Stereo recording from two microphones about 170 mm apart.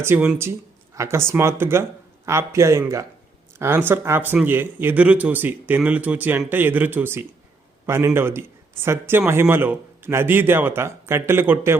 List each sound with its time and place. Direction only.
0.0 s a man's voice: 10° right (ahead or behind)